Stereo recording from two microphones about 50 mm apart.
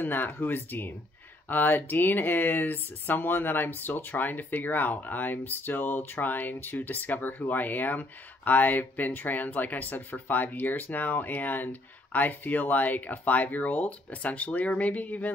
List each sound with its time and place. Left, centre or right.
0.0 s speech: left